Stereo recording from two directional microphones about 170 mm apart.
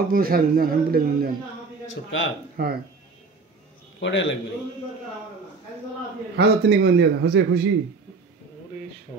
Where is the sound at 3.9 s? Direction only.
90° left.